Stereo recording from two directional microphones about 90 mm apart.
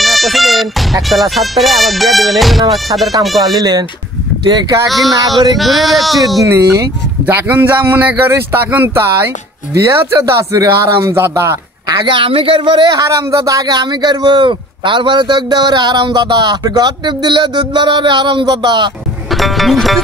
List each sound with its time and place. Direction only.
0.0 s music: centre (ahead or behind)
3.3 s speech: 45° right (ahead or behind)
4.8 s music: centre (ahead or behind)
6.4 s speech: 35° right (ahead or behind)
7.2 s speech: 20° right (ahead or behind)
9.8 s speech: 35° right (ahead or behind)
12.0 s speech: 70° right (ahead or behind)
13.0 s a man's voice: 35° right (ahead or behind); by 18.9 s 55° right (ahead or behind)
19.3 s music: centre (ahead or behind)